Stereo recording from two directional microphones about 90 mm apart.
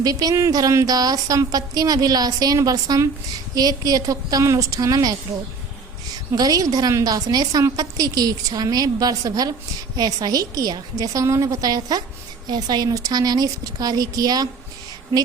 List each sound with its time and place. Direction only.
0.0 s a woman's voice: 45° right (ahead or behind)
6.3 s a woman's voice: 45° right (ahead or behind)